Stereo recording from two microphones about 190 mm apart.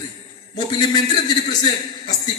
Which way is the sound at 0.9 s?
20° left (ahead or behind).